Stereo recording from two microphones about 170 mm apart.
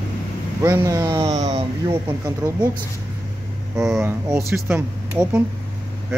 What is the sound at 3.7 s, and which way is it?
Speech, 5° right (ahead or behind).